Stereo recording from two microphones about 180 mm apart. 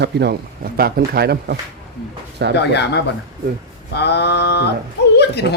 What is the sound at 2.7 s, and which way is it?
A woman's voice, 70° left (ahead or behind).